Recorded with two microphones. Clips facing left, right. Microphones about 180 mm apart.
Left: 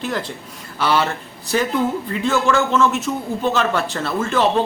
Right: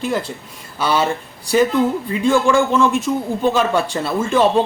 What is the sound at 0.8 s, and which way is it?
Speech, 15° right (ahead or behind).